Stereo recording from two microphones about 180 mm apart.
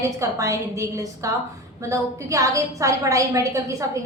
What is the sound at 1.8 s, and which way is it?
A woman's voice, 15° right (ahead or behind).